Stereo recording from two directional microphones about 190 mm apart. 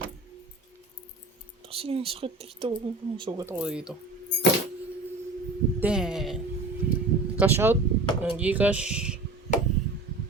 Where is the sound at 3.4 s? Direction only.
10° right (ahead or behind).